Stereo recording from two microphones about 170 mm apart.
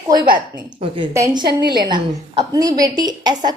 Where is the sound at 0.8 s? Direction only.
35° right (ahead or behind).